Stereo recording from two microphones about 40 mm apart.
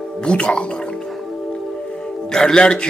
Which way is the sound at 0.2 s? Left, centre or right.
Left.